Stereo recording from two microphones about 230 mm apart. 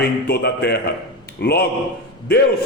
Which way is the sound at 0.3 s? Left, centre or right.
Left.